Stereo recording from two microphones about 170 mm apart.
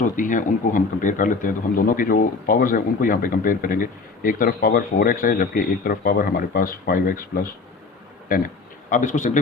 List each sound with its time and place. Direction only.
0.0 s a man's voice: 50° left (ahead or behind)